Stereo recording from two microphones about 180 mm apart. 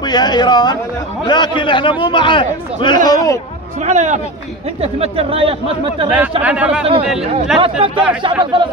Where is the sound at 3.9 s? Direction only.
40° right (ahead or behind).